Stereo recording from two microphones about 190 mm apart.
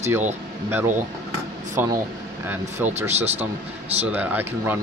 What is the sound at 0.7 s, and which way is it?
Speech, 10° right (ahead or behind).